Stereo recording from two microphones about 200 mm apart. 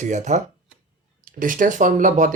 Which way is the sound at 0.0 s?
35° right (ahead or behind).